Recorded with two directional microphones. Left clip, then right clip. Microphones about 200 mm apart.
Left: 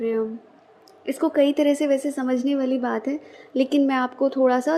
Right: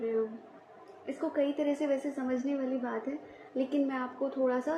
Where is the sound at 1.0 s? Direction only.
55° left (ahead or behind).